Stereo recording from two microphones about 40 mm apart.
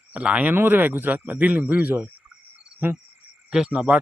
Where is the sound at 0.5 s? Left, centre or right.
Right.